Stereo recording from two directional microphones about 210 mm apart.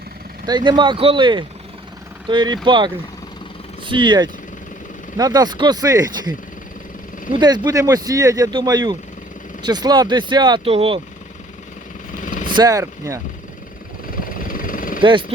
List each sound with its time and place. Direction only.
0.4 s speech: 20° right (ahead or behind)
7.3 s speech: 20° right (ahead or behind)
12.2 s vehicle: 40° left (ahead or behind)
12.5 s speech: 15° right (ahead or behind)
14.3 s vehicle: 40° left (ahead or behind)